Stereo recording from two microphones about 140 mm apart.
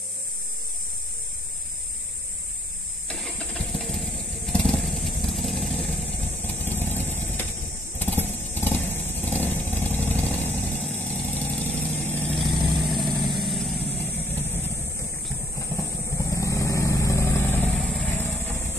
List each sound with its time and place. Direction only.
3.1 s motorcycle: 5° left (ahead or behind)
8.3 s vehicle: 15° left (ahead or behind)
12.5 s vehicle: centre (ahead or behind)
13.8 s vehicle: 15° left (ahead or behind)
17.7 s vehicle: centre (ahead or behind)
18.1 s vehicle: 15° left (ahead or behind)